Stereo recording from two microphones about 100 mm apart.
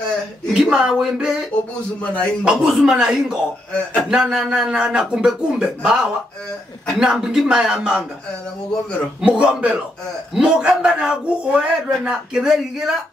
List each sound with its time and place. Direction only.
0.5 s a man's voice: 10° right (ahead or behind)
2.0 s speech: 15° left (ahead or behind)
2.4 s a man's voice: 5° right (ahead or behind)
9.2 s a man's voice: 10° right (ahead or behind)